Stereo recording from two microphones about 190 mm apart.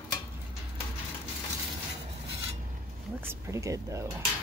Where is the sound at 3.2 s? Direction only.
15° right (ahead or behind).